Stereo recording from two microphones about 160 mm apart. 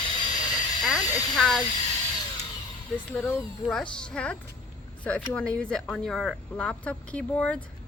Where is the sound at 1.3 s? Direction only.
Centre (ahead or behind).